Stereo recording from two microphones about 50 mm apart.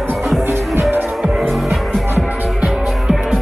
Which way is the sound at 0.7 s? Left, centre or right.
Right.